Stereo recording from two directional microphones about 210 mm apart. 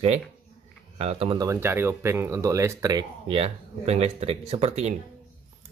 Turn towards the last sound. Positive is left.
turn(degrees=-30)  # may be behind; listen again after turning